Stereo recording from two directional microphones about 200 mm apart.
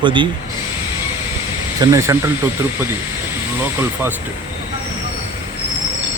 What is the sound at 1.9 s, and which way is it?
Speech, 15° right (ahead or behind).